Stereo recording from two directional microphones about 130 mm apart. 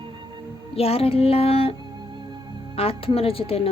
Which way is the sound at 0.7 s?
50° left (ahead or behind).